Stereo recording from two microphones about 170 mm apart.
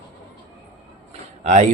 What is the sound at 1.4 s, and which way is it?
Speech, 45° right (ahead or behind).